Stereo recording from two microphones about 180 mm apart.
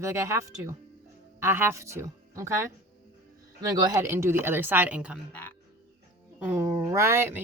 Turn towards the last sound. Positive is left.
turn(degrees=-15)  # may be behind; listen again after turning